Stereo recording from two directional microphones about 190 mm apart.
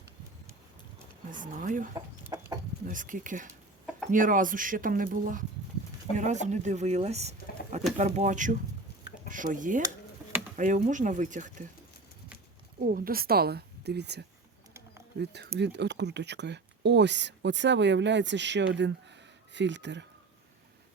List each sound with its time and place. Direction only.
1.3 s speech: 45° right (ahead or behind)
2.2 s chicken: 20° right (ahead or behind)
2.8 s speech: 45° right (ahead or behind)
12.8 s a woman's voice: 50° right (ahead or behind); by 20.1 s 65° right (ahead or behind)